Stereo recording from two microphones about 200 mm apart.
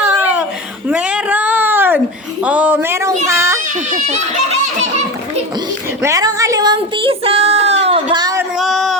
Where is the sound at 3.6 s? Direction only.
40° right (ahead or behind).